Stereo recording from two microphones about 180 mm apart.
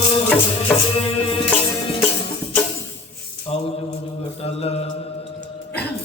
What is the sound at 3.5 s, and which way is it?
Mantra, 35° left (ahead or behind).